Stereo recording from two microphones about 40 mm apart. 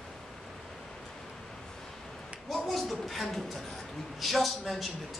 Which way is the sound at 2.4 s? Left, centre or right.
Centre.